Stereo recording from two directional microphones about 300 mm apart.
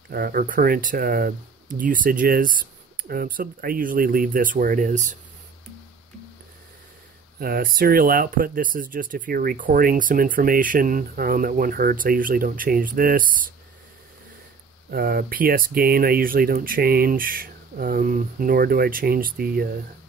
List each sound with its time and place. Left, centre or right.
0.1 s speech: right
7.3 s speech: right
14.9 s speech: right